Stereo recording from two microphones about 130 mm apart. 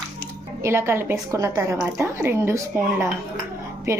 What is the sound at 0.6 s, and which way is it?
A woman's voice, 20° right (ahead or behind).